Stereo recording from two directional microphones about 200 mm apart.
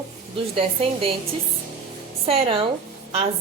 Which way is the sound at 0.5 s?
30° right (ahead or behind).